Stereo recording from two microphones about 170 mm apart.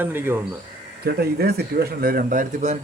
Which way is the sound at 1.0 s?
65° right (ahead or behind).